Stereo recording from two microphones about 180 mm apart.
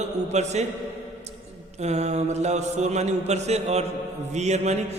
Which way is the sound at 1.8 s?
40° right (ahead or behind).